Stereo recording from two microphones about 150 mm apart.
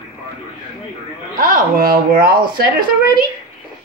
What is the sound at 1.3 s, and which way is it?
Speech, 70° right (ahead or behind).